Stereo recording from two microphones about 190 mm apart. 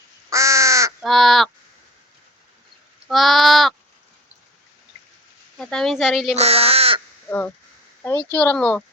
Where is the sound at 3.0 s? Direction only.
Centre (ahead or behind).